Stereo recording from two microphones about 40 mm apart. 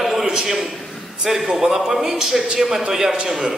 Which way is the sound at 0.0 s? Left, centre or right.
Centre.